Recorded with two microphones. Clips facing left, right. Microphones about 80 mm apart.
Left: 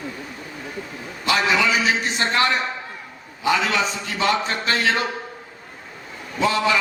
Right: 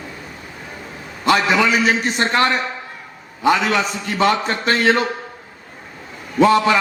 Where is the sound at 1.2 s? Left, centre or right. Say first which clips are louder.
Right 4 dB; right.